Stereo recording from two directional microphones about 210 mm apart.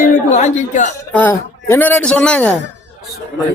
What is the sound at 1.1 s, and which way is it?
A man's voice, 10° left (ahead or behind).